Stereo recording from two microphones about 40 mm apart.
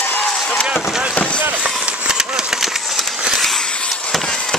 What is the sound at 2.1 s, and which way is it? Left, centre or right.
Vehicle, centre.